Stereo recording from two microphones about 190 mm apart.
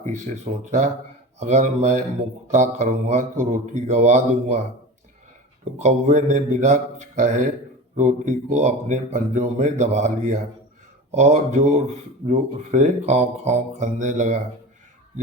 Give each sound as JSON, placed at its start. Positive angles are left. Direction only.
{"t": 0.0, "sound": "speech", "side_deg": -40}
{"t": 5.6, "sound": "speech", "side_deg": -40}